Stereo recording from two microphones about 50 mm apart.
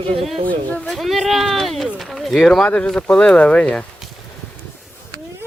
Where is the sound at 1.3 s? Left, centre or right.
Centre.